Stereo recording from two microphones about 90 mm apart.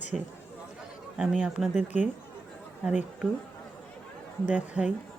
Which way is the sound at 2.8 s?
15° right (ahead or behind).